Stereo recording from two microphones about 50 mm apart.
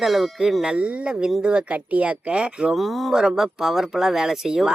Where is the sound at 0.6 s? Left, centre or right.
Centre.